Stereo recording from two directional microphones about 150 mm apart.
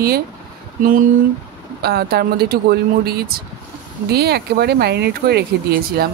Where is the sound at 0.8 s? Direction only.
65° right (ahead or behind).